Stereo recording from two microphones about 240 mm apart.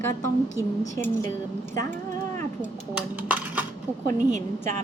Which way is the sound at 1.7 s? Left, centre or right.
Centre.